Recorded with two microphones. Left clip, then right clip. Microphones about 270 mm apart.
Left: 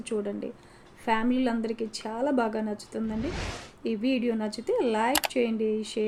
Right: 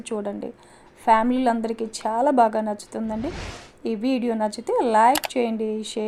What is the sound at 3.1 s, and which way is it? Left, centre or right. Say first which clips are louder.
Speech: right 3 dB; centre.